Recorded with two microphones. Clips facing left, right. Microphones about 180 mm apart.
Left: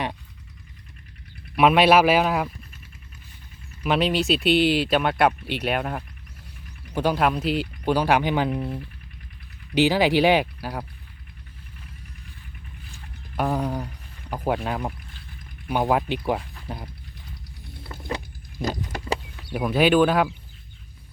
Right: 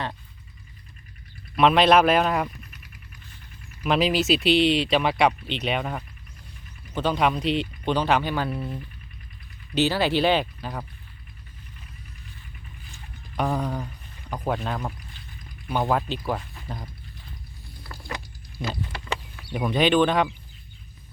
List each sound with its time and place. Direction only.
1.5 s speech: 5° left (ahead or behind)
3.8 s speech: centre (ahead or behind)
13.3 s speech: 5° left (ahead or behind)
17.8 s a sound: 20° left (ahead or behind)
18.9 s a sound: 40° left (ahead or behind)
19.5 s speech: 5° left (ahead or behind)